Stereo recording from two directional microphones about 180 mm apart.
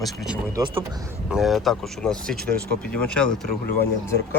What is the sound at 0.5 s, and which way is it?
Speech, 25° right (ahead or behind).